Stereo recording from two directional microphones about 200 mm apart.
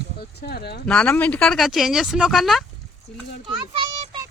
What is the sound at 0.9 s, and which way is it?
Speech, 5° left (ahead or behind).